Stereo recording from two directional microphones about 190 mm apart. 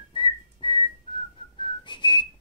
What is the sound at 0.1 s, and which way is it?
Whistling, 25° left (ahead or behind).